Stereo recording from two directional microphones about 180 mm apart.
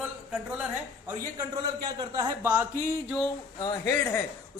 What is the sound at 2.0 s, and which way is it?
Speech, 20° right (ahead or behind).